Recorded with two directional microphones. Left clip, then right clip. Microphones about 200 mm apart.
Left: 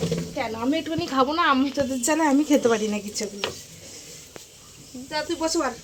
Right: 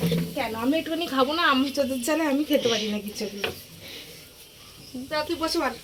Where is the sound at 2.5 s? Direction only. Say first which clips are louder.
Left 3 dB; 35° left (ahead or behind).